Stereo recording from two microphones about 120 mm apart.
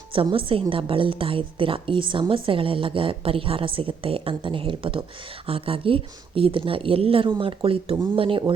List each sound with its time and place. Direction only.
0.1 s a woman's voice: 50° right (ahead or behind)